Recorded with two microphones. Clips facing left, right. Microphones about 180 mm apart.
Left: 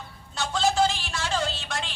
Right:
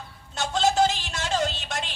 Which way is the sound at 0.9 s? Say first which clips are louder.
Right 1 dB; 20° right (ahead or behind).